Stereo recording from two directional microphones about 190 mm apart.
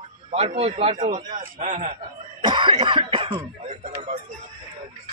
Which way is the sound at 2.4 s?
25° right (ahead or behind).